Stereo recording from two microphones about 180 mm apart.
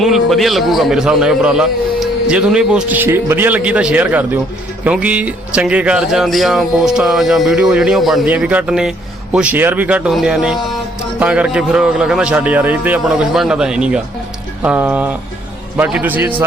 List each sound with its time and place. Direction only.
0.0 s a man's voice: centre (ahead or behind)